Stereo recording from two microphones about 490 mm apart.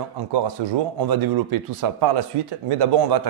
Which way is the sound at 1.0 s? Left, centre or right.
Right.